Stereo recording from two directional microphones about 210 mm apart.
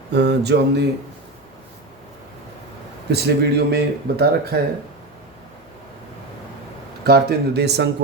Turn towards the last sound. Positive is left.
turn(degrees=-55)  # may be behind; listen again after turning